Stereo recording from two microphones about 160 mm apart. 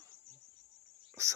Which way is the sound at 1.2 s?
15° right (ahead or behind).